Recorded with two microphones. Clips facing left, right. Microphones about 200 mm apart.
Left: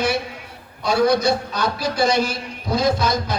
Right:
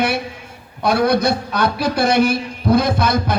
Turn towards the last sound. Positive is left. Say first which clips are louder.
# right 2 dB
turn(degrees=-60)  # may be behind; listen again after turning